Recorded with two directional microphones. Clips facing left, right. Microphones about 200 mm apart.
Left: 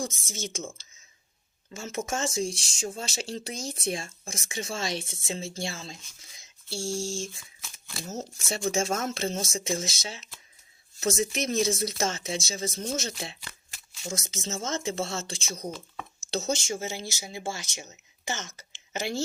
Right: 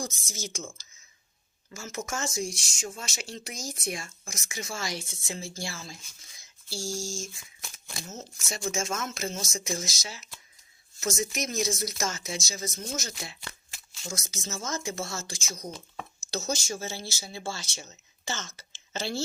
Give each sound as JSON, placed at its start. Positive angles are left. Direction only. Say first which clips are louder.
{"t": 0.0, "sound": "speech", "louder": "left 3 dB", "side_deg": 25}
{"t": 1.7, "sound": "speech", "louder": "left 3 dB", "side_deg": 30}